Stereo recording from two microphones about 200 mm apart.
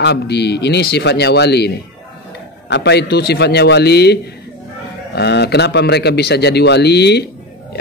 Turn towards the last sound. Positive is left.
turn(degrees=55)  # may be behind; listen again after turning